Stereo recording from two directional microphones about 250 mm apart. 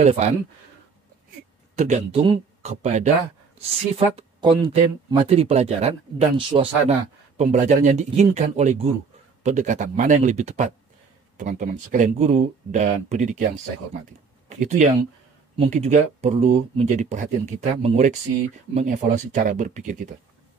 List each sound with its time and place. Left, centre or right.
0.0 s speech: right
1.8 s speech: right
14.5 s speech: right